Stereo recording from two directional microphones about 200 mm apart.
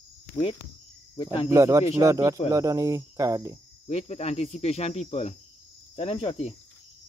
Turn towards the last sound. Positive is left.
turn(degrees=30)  # may be behind; listen again after turning